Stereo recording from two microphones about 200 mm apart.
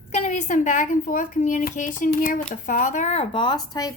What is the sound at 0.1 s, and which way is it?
A child's voice, 35° left (ahead or behind).